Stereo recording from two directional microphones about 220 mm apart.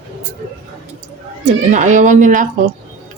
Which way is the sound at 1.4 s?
35° right (ahead or behind).